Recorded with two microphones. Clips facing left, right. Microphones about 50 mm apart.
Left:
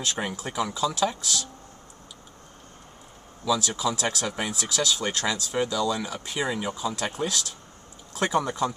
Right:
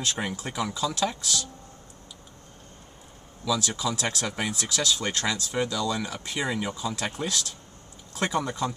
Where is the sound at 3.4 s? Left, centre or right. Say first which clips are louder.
Left 2 dB; centre.